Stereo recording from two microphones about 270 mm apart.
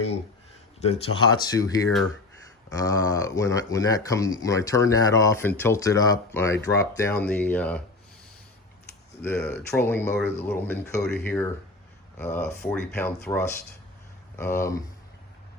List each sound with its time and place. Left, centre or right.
0.8 s speech: left; by 7.8 s centre
9.2 s speech: centre